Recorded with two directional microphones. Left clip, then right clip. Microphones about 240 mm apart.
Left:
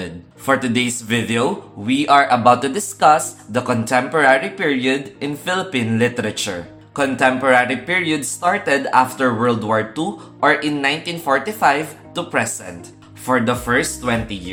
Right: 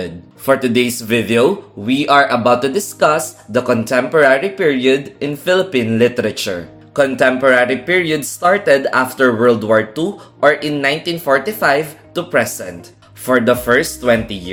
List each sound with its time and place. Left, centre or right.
0.0 s a man's voice: centre